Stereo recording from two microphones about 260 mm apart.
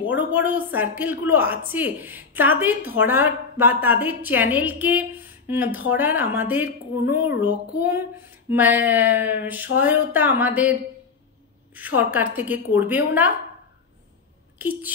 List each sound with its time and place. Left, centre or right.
0.0 s a woman's voice: centre
11.7 s a woman's voice: centre
14.6 s a sound: centre